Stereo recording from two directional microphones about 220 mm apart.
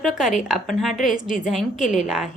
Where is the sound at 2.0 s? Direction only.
5° right (ahead or behind).